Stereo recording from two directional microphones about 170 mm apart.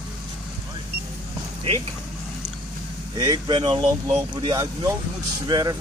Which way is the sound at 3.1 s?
25° right (ahead or behind).